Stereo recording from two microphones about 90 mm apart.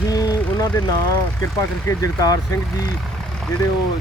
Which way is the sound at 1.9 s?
40° left (ahead or behind).